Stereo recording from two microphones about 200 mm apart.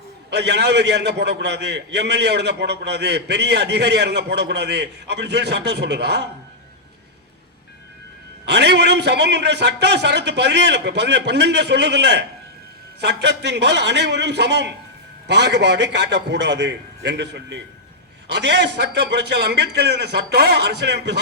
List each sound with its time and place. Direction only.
0.3 s a man's voice: 55° right (ahead or behind)
8.4 s a man's voice: 60° right (ahead or behind)